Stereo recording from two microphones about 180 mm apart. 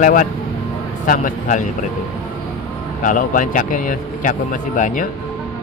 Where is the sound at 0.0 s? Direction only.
50° left (ahead or behind).